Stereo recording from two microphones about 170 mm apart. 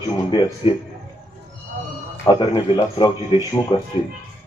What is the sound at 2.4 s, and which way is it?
A man's voice, 30° left (ahead or behind).